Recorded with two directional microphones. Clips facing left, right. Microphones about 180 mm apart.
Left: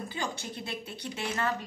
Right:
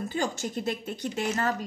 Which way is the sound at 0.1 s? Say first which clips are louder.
Right 6 dB; 45° right (ahead or behind).